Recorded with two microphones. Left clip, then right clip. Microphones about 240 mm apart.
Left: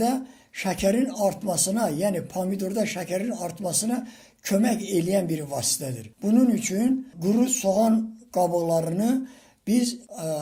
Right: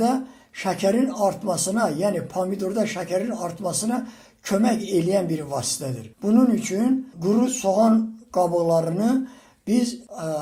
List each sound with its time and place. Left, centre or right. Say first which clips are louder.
0.0 s speech: right 3 dB; left